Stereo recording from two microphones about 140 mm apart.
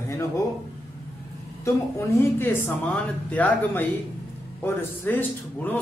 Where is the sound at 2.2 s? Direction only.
15° left (ahead or behind).